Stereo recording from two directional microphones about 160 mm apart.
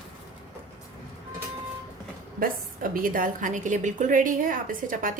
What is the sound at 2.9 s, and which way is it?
A woman's voice, 60° right (ahead or behind).